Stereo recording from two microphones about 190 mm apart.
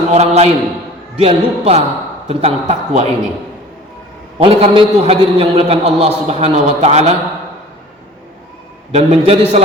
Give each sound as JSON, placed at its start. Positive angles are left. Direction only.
{"t": 0.1, "sound": "a man's voice", "side_deg": -35}
{"t": 4.4, "sound": "a man's voice", "side_deg": -30}
{"t": 8.9, "sound": "a man's voice", "side_deg": -35}